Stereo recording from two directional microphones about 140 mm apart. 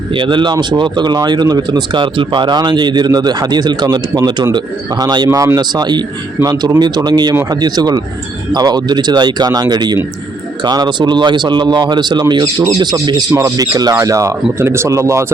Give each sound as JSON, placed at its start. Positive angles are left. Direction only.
{"t": 0.1, "sound": "a man's voice", "side_deg": -35}